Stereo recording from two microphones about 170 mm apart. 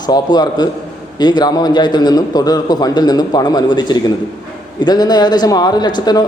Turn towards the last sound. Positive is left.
turn(degrees=25)  # may be behind; listen again after turning